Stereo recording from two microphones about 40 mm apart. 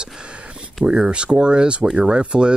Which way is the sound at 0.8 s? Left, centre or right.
Right.